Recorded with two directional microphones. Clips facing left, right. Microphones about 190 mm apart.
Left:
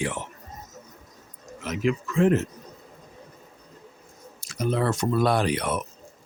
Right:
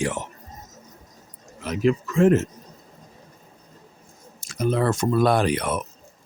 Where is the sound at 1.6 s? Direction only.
35° right (ahead or behind).